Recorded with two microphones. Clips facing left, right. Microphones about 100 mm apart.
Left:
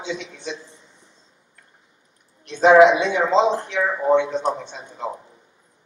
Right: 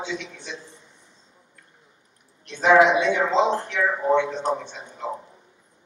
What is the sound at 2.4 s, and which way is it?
Speech, 20° left (ahead or behind).